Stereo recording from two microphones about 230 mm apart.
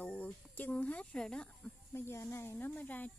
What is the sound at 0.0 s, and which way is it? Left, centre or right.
Speech, centre.